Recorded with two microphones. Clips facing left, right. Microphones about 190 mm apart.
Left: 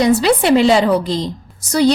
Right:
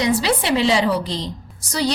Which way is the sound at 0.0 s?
55° left (ahead or behind).